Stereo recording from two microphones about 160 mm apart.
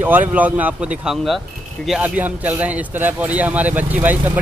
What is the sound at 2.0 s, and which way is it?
Speech, 10° right (ahead or behind).